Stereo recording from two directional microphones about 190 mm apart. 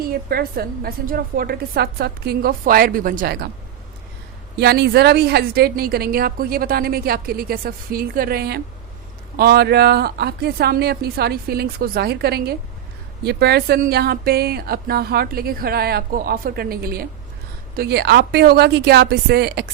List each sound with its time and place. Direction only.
0.0 s a woman's voice: 50° right (ahead or behind)
4.5 s a woman's voice: 60° right (ahead or behind)